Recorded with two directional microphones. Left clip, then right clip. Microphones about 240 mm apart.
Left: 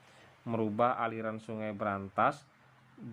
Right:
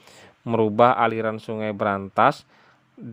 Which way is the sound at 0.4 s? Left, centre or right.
Right.